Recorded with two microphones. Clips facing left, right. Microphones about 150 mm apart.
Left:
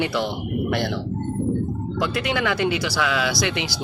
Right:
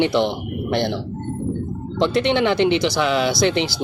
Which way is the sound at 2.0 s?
30° right (ahead or behind).